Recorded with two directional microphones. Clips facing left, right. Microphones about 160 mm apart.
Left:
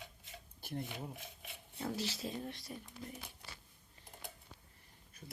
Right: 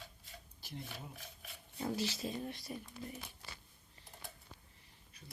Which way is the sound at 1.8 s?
5° right (ahead or behind).